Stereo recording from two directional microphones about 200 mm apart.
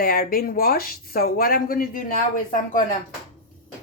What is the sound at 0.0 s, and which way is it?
Speech, 50° left (ahead or behind).